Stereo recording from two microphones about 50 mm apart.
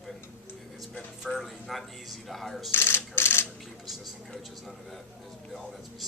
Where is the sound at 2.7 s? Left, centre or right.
Left.